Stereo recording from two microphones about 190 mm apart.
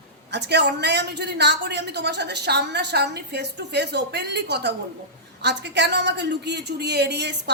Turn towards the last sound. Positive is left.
turn(degrees=-60)  # may be behind; listen again after turning